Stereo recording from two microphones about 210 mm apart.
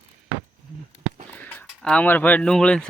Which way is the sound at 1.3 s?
10° left (ahead or behind).